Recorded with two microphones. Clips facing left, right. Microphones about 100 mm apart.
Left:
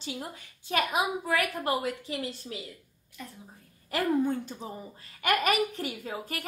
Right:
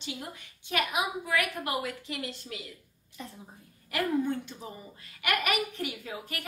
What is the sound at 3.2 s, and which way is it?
Speech, 25° right (ahead or behind).